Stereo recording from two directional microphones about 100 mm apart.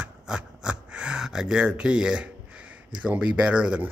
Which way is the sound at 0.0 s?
10° right (ahead or behind).